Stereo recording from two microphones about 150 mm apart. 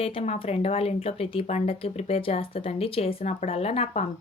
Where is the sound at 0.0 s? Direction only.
40° left (ahead or behind).